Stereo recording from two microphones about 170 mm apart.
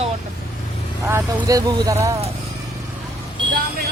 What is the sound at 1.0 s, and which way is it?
Speech, 15° right (ahead or behind).